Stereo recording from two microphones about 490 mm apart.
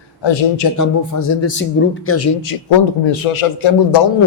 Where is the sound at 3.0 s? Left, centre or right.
Left.